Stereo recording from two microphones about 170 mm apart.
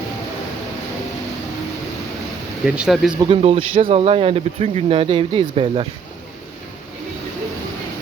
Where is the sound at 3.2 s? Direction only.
30° right (ahead or behind).